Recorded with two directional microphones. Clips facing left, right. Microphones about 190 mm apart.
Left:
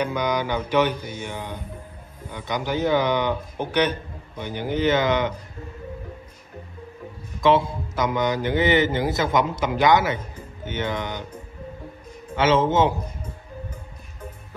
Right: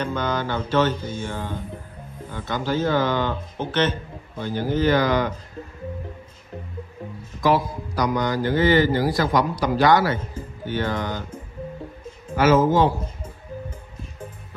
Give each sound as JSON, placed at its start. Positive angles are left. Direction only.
{"t": 0.0, "sound": "speech", "side_deg": 15}
{"t": 7.4, "sound": "a man's voice", "side_deg": 25}
{"t": 12.4, "sound": "a man's voice", "side_deg": 25}